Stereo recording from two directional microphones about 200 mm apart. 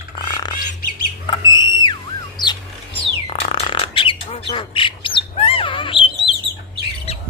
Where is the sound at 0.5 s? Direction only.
45° left (ahead or behind).